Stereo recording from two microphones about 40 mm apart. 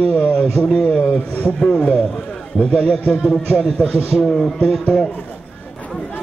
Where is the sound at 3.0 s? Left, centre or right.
Left.